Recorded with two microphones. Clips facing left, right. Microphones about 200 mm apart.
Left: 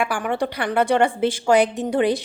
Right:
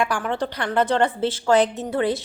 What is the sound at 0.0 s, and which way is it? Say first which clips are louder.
Speech: left 1 dB; 10° left (ahead or behind).